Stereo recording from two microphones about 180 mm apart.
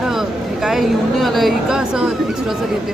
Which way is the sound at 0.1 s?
Centre (ahead or behind).